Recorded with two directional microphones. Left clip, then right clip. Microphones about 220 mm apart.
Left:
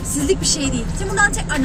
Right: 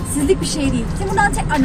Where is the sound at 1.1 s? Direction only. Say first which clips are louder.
Even; 10° left (ahead or behind).